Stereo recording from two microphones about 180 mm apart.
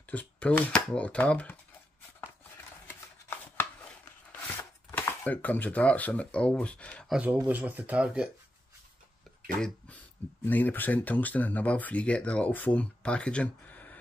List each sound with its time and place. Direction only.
0.1 s speech: 10° left (ahead or behind)
2.9 s chopping: 10° left (ahead or behind)
7.2 s speech: 10° right (ahead or behind)
10.4 s speech: 10° left (ahead or behind)